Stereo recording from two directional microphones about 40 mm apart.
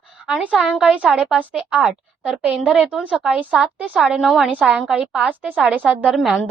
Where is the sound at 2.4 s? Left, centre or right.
Right; by 4.5 s centre.